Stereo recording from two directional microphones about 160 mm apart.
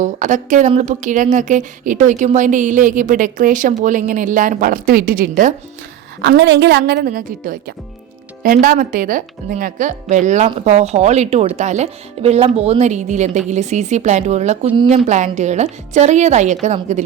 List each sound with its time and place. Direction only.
0.0 s a woman's voice: 50° right (ahead or behind)
6.2 s a woman's voice: 90° right; by 16.7 s 45° right (ahead or behind)